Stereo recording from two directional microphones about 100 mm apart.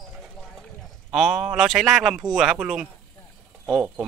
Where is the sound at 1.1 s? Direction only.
5° right (ahead or behind).